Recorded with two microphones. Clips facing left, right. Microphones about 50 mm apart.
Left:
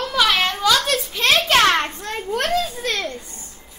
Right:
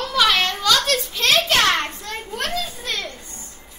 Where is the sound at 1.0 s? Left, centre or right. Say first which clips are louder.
Left 1 dB; centre.